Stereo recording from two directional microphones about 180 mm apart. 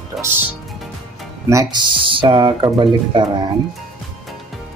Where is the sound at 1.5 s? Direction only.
20° right (ahead or behind).